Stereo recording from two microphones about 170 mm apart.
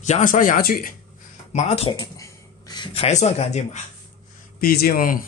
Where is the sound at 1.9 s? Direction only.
20° left (ahead or behind); by 3.8 s 45° left (ahead or behind).